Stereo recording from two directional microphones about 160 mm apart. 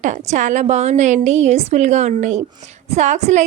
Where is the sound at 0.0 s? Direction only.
45° right (ahead or behind).